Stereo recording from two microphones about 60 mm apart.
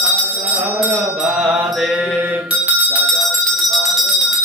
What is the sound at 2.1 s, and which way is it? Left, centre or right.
Bicycle bell, right.